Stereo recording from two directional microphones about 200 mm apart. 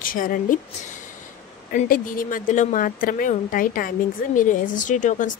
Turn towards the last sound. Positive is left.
turn(degrees=40)  # may be behind; listen again after turning